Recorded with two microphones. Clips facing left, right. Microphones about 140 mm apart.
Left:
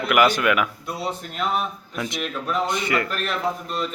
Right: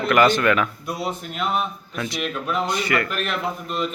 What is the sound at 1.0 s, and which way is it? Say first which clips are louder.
Speech: even; 5° right (ahead or behind).